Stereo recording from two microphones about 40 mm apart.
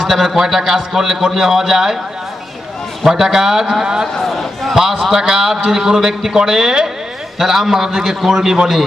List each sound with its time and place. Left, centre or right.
0.0 s a man's voice: centre
3.1 s a man's voice: centre
4.2 s a sound: centre
4.7 s a man's voice: centre